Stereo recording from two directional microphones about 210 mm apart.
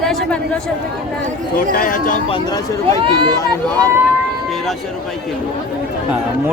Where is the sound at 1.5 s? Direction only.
40° left (ahead or behind).